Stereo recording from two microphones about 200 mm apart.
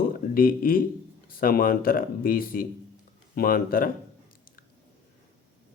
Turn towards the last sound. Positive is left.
turn(degrees=45)  # may be behind; listen again after turning